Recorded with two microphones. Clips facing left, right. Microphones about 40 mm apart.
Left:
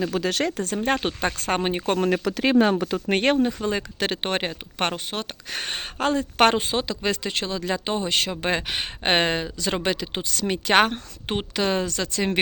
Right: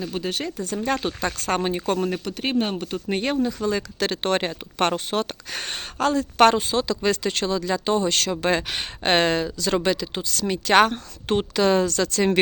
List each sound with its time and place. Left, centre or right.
0.0 s speech: left
0.7 s speech: left
2.0 s speech: left
3.1 s speech: left
3.3 s speech: left
3.7 s speech: left
5.7 s speech: left
6.8 s speech: centre
7.6 s speech: left